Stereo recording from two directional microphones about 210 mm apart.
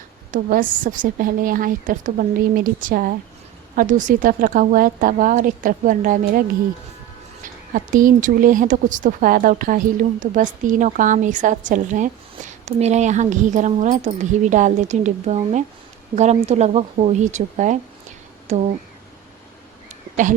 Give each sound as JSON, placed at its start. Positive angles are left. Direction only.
{"t": 0.3, "sound": "speech", "side_deg": -40}
{"t": 7.4, "sound": "speech", "side_deg": -40}